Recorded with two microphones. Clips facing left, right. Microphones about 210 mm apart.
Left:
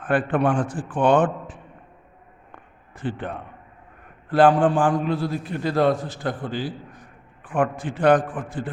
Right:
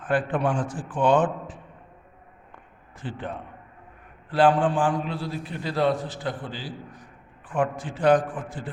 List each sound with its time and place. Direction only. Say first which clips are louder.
0.0 s a man's voice: left 3 dB; 60° left (ahead or behind)
3.0 s a man's voice: left 5 dB; 60° left (ahead or behind)
4.3 s a man's voice: left 4 dB; 45° left (ahead or behind)